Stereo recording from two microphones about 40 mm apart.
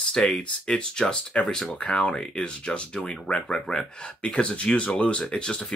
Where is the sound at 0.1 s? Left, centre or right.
Left.